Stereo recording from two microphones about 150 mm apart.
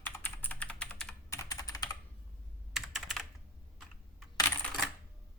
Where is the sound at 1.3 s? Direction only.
20° left (ahead or behind).